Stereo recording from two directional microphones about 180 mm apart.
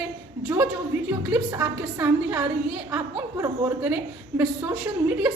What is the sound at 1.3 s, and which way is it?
A woman's voice, 15° right (ahead or behind).